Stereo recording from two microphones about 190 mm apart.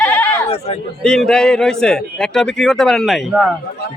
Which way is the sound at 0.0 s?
10° left (ahead or behind).